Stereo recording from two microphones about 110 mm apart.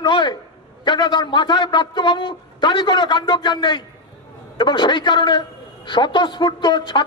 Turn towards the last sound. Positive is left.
turn(degrees=45)  # may be behind; listen again after turning